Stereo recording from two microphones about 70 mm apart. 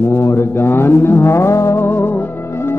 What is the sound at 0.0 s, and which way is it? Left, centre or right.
Music, left.